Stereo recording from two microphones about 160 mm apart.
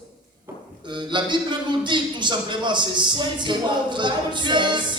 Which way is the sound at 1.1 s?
30° right (ahead or behind).